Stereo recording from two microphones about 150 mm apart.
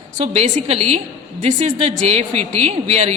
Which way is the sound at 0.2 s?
45° right (ahead or behind).